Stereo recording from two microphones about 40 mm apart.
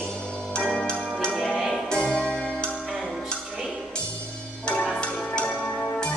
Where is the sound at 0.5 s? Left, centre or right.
Centre.